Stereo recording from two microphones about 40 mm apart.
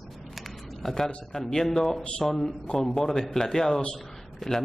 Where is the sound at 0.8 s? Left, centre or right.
Centre.